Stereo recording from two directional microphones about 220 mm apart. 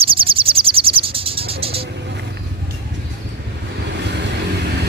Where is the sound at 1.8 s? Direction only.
50° right (ahead or behind).